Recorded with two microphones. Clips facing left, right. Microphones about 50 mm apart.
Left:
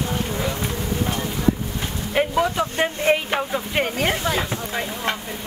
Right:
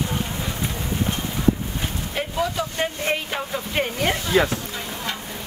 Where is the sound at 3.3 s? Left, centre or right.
Centre.